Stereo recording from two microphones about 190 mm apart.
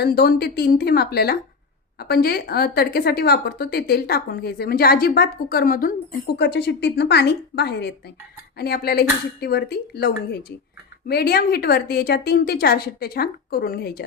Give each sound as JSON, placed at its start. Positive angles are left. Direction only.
{"t": 0.0, "sound": "a woman's voice", "side_deg": 55}